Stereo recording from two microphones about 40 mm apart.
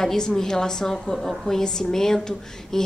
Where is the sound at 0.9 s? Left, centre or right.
Centre.